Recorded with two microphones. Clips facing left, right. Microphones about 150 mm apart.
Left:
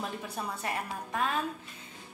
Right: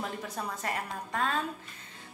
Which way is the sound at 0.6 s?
10° left (ahead or behind).